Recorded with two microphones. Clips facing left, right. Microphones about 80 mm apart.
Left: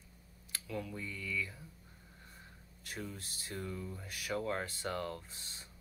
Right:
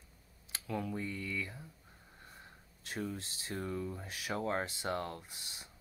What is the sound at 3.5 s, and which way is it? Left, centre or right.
Speech, right.